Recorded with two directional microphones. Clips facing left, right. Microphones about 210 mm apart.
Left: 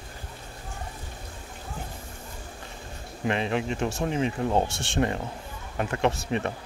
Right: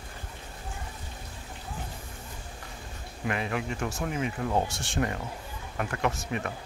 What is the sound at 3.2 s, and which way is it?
Speech, 25° left (ahead or behind).